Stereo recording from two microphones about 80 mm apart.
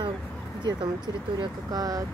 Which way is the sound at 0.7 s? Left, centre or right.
Right.